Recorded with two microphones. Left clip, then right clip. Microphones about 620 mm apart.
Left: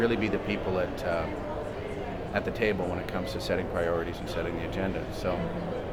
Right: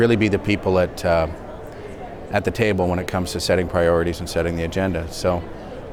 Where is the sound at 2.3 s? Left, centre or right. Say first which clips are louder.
Right 9 dB; right.